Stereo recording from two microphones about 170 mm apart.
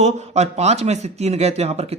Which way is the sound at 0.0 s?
40° right (ahead or behind).